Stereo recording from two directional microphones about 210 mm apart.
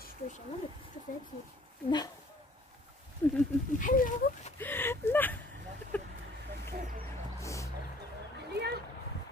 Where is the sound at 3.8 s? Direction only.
40° left (ahead or behind).